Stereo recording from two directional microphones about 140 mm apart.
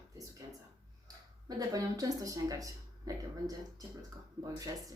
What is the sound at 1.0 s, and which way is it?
A woman's voice, 30° right (ahead or behind).